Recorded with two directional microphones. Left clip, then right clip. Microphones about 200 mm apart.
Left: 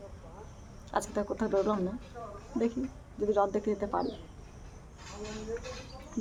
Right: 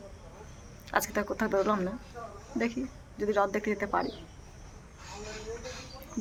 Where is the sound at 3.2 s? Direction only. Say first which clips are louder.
Even; 5° right (ahead or behind).